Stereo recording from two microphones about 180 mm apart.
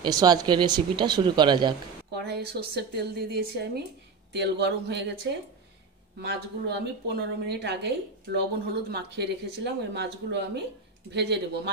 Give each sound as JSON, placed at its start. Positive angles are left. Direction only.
{"t": 0.0, "sound": "speech", "side_deg": -20}
{"t": 2.1, "sound": "a woman's voice", "side_deg": -65}